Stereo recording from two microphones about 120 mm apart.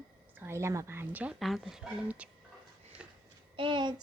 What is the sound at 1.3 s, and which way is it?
Speech, centre (ahead or behind).